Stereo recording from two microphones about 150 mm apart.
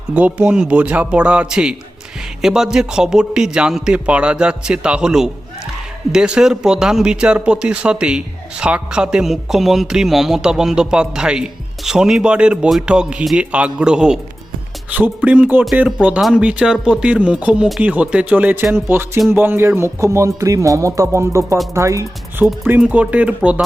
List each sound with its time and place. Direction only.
0.1 s speech: 10° right (ahead or behind)